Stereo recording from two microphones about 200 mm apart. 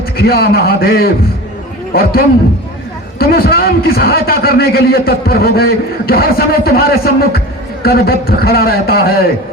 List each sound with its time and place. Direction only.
0.2 s a man's voice: 50° left (ahead or behind)